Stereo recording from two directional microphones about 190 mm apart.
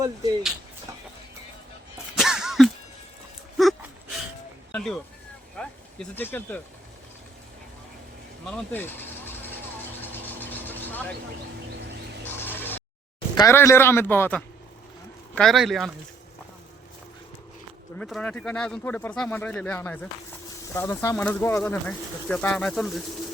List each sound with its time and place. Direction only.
0.0 s speech: 20° right (ahead or behind)
2.1 s a sound: 5° right (ahead or behind)
4.7 s speech: centre (ahead or behind)
8.4 s vehicle: 5° left (ahead or behind)
12.2 s a sound: 10° left (ahead or behind)
13.3 s speech: 15° left (ahead or behind); by 15.9 s centre (ahead or behind)
17.9 s speech: 5° left (ahead or behind)